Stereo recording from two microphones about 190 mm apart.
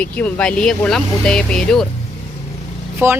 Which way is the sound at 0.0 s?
5° left (ahead or behind).